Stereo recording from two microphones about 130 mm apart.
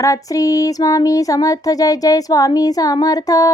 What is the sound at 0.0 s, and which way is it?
Speech, 25° left (ahead or behind).